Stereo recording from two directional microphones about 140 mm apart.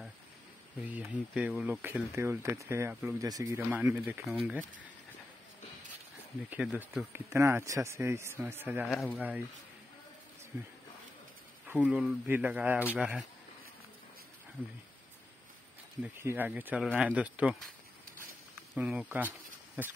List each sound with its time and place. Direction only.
0.9 s speech: 10° right (ahead or behind)
3.2 s speech: 25° right (ahead or behind)
3.5 s speech: 10° right (ahead or behind)
6.5 s speech: 10° right (ahead or behind)
7.1 s speech: 20° right (ahead or behind)
8.8 s speech: centre (ahead or behind)
9.1 s speech: 10° right (ahead or behind)
11.6 s speech: 10° right (ahead or behind)
16.0 s speech: 15° right (ahead or behind)
18.8 s speech: 10° right (ahead or behind)